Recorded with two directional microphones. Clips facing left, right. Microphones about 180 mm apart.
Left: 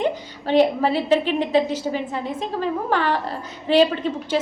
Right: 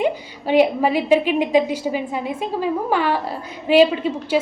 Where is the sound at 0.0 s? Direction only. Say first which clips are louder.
Right 2 dB; 10° right (ahead or behind).